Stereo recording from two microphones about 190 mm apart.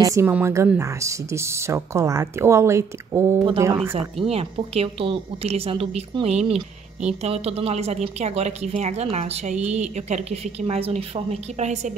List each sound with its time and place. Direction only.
0.0 s speech: 15° right (ahead or behind)
4.2 s a woman's voice: 30° right (ahead or behind)